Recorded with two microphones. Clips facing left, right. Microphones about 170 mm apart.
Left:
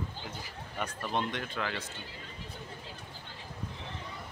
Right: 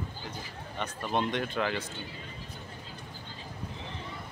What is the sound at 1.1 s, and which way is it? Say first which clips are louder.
Speech: right 6 dB; 20° right (ahead or behind).